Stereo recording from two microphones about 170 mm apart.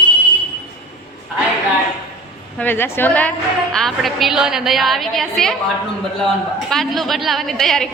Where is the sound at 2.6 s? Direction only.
10° left (ahead or behind).